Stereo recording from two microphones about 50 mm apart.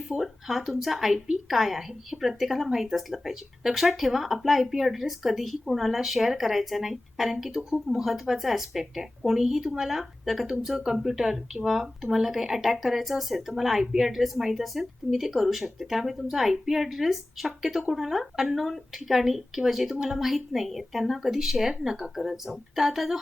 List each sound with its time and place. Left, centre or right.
0.1 s a woman's voice: centre